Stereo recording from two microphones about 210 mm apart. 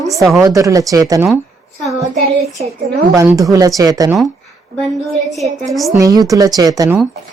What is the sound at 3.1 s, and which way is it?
A woman's voice, 15° right (ahead or behind).